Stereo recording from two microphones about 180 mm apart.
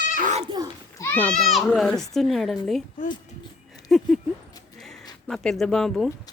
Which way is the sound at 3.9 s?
Centre (ahead or behind).